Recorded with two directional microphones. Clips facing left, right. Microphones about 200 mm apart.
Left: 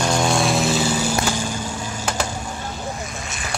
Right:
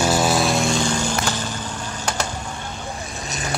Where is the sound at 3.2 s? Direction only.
40° right (ahead or behind).